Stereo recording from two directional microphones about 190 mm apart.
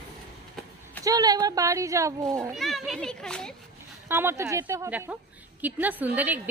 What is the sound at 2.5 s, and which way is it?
A child's voice, centre (ahead or behind).